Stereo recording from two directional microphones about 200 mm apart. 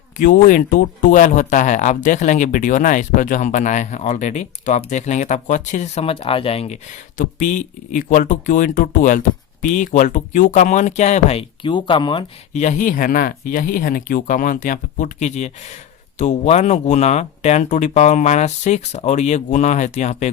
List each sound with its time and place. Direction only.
0.2 s speech: 40° left (ahead or behind)
7.2 s speech: 40° left (ahead or behind); by 12.2 s 25° left (ahead or behind)
12.5 s speech: 40° left (ahead or behind)